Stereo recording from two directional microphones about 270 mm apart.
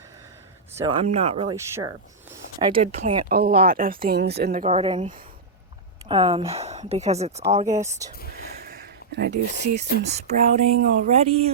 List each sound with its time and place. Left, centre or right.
0.7 s speech: centre
1.0 s speech: right
7.6 s speech: centre
8.4 s a sound: right
10.1 s speech: right